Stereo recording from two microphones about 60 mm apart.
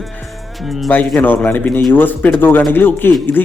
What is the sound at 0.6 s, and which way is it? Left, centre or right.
Speech, centre.